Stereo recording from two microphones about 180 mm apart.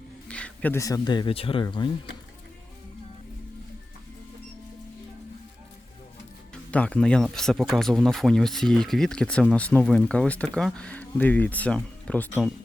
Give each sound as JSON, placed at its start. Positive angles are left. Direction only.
{"t": 0.3, "sound": "speech", "side_deg": 5}
{"t": 6.5, "sound": "speech", "side_deg": 5}